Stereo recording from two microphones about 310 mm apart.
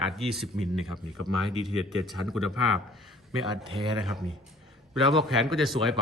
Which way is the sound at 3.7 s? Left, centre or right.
Centre.